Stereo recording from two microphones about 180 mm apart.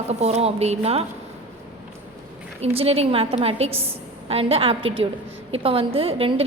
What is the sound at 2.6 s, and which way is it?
A woman's voice, 35° right (ahead or behind).